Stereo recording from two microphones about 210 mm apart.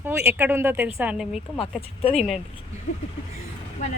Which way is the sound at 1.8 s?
30° left (ahead or behind).